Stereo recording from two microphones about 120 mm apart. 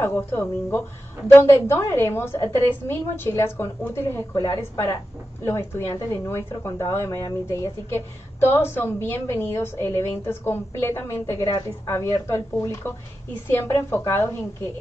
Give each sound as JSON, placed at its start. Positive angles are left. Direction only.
{"t": 0.0, "sound": "speech", "side_deg": 20}